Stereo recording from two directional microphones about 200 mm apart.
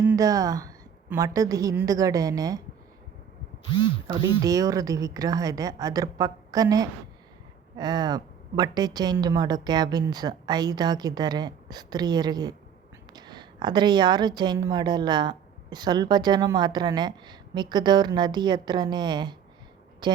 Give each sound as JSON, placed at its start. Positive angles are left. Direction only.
{"t": 0.0, "sound": "a woman's voice", "side_deg": -10}
{"t": 4.2, "sound": "a woman's voice", "side_deg": -15}